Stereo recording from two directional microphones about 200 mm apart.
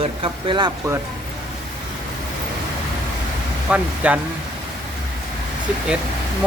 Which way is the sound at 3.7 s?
5° right (ahead or behind).